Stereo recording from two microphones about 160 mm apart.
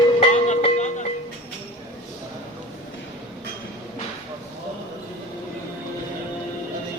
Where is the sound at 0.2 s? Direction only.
40° left (ahead or behind).